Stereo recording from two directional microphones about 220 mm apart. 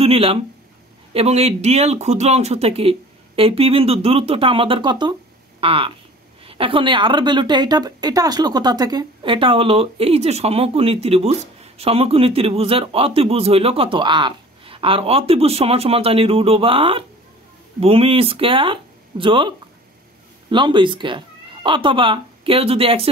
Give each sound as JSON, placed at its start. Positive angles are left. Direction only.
{"t": 0.0, "sound": "a woman's voice", "side_deg": -25}